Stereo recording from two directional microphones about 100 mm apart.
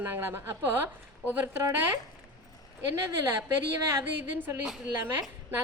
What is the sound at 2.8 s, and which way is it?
Speech, 30° right (ahead or behind).